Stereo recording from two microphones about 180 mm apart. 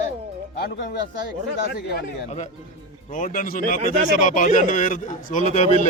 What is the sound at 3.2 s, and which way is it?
A man's voice, 50° left (ahead or behind).